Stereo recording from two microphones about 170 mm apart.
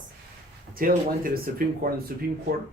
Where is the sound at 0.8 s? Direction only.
55° right (ahead or behind).